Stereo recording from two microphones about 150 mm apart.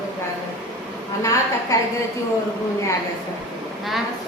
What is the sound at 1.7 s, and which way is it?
Speech, 25° left (ahead or behind).